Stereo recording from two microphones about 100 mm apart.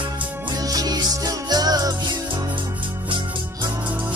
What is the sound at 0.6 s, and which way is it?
Music, 40° right (ahead or behind).